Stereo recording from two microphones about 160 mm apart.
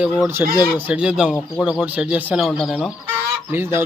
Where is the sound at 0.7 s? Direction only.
10° right (ahead or behind).